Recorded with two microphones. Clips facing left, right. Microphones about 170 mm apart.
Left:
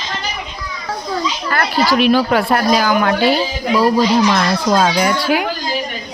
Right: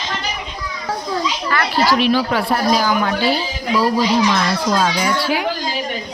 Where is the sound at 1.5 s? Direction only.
45° left (ahead or behind).